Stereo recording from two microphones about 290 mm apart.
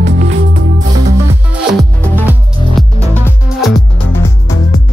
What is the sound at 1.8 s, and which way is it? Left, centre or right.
Music, centre.